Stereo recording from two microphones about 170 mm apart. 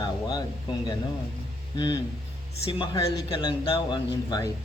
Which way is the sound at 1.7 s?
25° left (ahead or behind).